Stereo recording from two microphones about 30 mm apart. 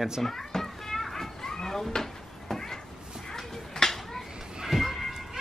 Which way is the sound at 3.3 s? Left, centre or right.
Centre.